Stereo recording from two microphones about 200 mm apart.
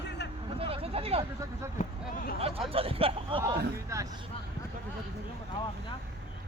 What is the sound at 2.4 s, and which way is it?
Speech, 30° right (ahead or behind).